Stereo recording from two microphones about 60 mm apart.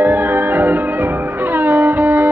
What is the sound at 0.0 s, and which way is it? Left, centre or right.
Music, right.